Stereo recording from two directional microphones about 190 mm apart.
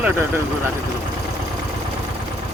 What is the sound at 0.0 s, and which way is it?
Speech, 10° right (ahead or behind).